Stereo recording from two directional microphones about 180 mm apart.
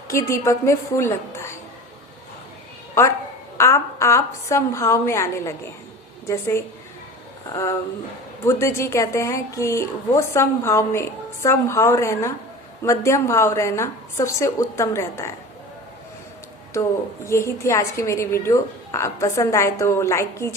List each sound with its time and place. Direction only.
0.1 s a woman's voice: 15° left (ahead or behind)
3.6 s a woman's voice: 15° left (ahead or behind)
17.2 s a woman's voice: 15° left (ahead or behind)